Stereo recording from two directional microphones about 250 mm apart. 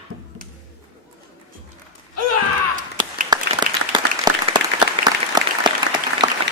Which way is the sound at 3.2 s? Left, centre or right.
Centre.